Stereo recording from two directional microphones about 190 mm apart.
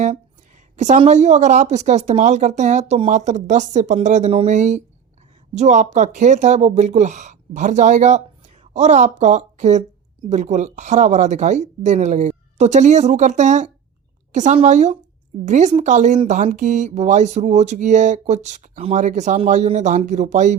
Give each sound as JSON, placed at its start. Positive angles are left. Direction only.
{"t": 0.8, "sound": "speech", "side_deg": -40}